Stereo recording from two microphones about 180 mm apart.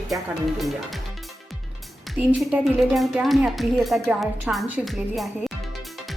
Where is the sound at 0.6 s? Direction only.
Centre (ahead or behind).